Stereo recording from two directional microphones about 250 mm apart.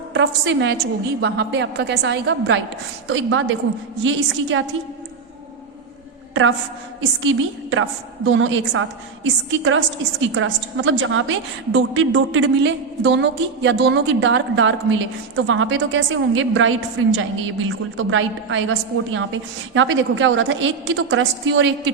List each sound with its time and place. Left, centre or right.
0.1 s a woman's voice: right
7.2 s a woman's voice: right